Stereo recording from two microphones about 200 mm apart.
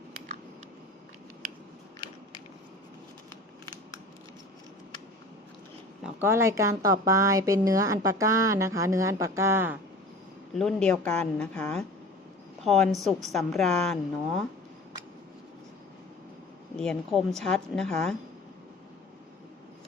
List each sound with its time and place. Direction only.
6.0 s speech: 10° right (ahead or behind)
10.5 s a woman's voice: centre (ahead or behind)
16.7 s a woman's voice: 5° left (ahead or behind)